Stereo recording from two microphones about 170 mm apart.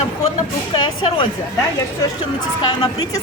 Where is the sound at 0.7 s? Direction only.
30° left (ahead or behind).